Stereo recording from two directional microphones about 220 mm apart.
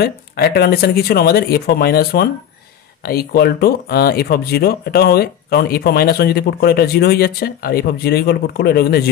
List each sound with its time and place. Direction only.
0.0 s speech: 45° left (ahead or behind)